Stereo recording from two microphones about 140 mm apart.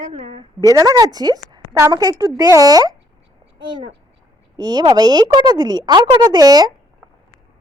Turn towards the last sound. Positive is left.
turn(degrees=-25)  # may be behind; listen again after turning